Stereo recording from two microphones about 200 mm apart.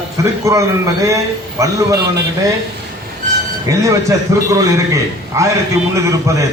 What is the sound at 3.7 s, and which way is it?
A man's voice, 15° right (ahead or behind).